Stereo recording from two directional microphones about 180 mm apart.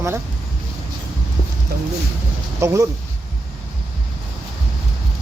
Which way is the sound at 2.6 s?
15° right (ahead or behind).